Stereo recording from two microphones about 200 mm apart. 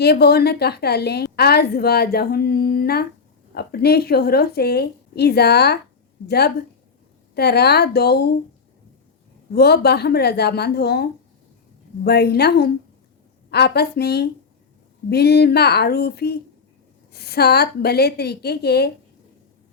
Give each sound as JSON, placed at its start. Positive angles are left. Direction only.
{"t": 0.0, "sound": "a woman's voice", "side_deg": 55}
{"t": 9.6, "sound": "a woman's voice", "side_deg": 55}